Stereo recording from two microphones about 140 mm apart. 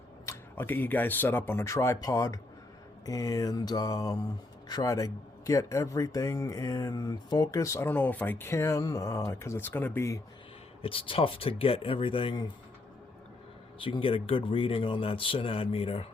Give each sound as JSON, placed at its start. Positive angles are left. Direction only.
{"t": 0.3, "sound": "speech", "side_deg": 15}
{"t": 10.8, "sound": "speech", "side_deg": 40}
{"t": 13.7, "sound": "speech", "side_deg": 40}